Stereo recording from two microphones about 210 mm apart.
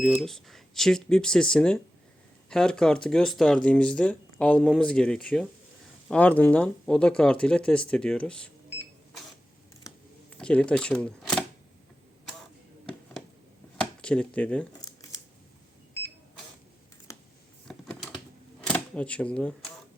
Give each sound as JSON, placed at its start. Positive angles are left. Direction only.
{"t": 0.0, "sound": "speech", "side_deg": 0}
{"t": 9.8, "sound": "camera", "side_deg": 5}
{"t": 13.7, "sound": "a sound", "side_deg": 5}
{"t": 14.8, "sound": "scissors", "side_deg": 15}
{"t": 17.1, "sound": "a sound", "side_deg": 15}
{"t": 17.7, "sound": "typing", "side_deg": 0}
{"t": 18.7, "sound": "speech", "side_deg": 5}